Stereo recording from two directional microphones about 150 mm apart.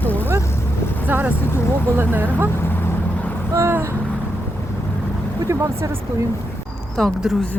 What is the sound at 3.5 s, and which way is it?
Speech, 15° right (ahead or behind).